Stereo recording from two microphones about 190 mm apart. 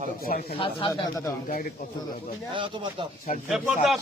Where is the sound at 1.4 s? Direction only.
45° left (ahead or behind).